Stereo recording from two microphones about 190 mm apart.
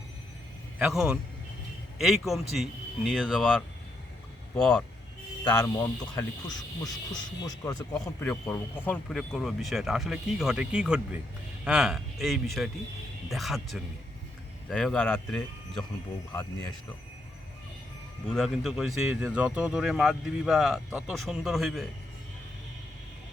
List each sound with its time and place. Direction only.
0.8 s speech: 5° right (ahead or behind)
5.5 s speech: 15° left (ahead or behind)
8.2 s speech: 10° left (ahead or behind)
16.3 s speech: 20° left (ahead or behind)
18.3 s speech: centre (ahead or behind)